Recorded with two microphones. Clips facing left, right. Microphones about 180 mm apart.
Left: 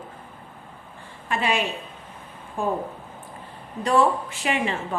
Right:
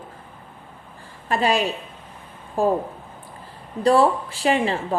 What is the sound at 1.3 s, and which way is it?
Speech, 35° right (ahead or behind).